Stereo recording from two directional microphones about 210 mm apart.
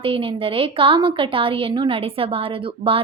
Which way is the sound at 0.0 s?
25° right (ahead or behind).